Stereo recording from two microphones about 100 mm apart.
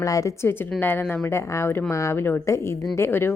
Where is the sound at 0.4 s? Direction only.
20° left (ahead or behind).